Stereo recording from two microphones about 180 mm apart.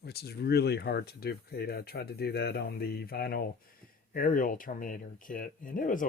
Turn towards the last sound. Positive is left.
turn(degrees=45)  # may be behind; listen again after turning